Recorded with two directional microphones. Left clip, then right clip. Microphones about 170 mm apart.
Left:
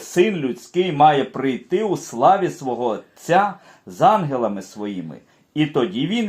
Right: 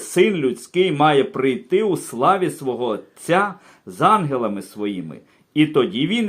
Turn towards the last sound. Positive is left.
turn(degrees=-20)  # may be behind; listen again after turning